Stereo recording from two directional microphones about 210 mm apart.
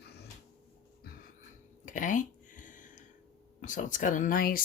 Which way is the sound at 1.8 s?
40° left (ahead or behind).